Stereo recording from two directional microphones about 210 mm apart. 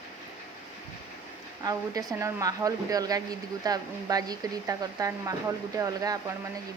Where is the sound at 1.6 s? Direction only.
15° right (ahead or behind).